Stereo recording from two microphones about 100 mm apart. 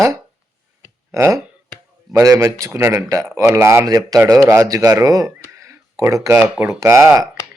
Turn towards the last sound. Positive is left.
turn(degrees=-30)  # may be behind; listen again after turning